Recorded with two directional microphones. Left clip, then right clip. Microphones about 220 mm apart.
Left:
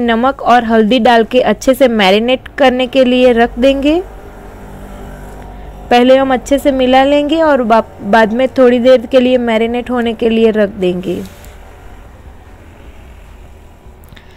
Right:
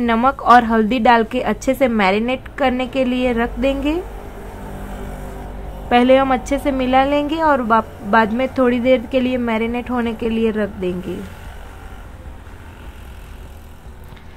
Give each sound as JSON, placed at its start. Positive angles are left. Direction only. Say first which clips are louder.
{"t": 0.0, "sound": "a woman's voice", "louder": "left 4 dB", "side_deg": 20}
{"t": 5.9, "sound": "a woman's voice", "louder": "left 5 dB", "side_deg": 25}